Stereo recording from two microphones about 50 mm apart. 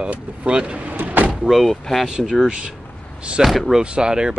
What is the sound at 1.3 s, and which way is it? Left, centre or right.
Speech, centre.